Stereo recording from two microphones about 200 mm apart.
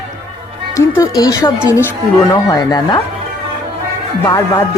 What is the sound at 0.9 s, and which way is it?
Speech, 20° left (ahead or behind).